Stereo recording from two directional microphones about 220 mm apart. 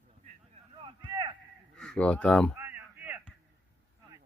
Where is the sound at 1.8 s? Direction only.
5° left (ahead or behind).